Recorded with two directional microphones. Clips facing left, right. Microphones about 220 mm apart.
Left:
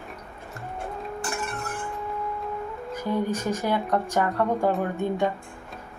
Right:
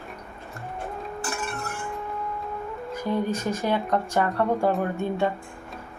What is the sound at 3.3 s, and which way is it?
A woman's voice, 15° left (ahead or behind).